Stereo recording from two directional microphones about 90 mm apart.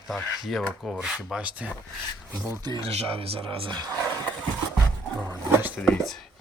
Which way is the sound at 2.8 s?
90° right.